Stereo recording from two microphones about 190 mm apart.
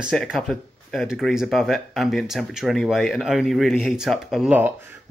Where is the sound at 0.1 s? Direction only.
Centre (ahead or behind).